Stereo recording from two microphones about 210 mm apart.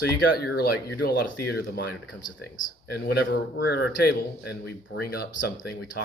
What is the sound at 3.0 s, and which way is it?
A man's voice, 55° left (ahead or behind).